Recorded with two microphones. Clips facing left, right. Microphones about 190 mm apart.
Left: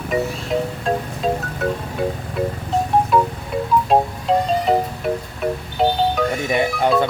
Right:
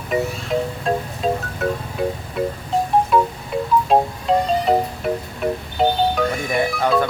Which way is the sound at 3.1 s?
Centre (ahead or behind).